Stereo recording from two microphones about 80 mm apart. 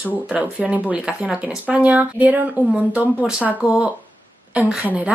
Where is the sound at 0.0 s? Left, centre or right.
Centre.